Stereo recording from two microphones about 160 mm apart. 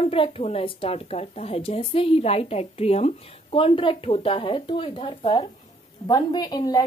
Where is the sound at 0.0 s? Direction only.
35° left (ahead or behind).